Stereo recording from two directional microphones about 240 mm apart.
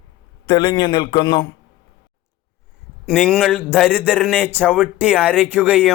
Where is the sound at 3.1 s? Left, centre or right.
Centre.